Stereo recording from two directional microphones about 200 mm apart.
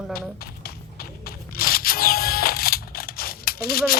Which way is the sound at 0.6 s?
50° left (ahead or behind).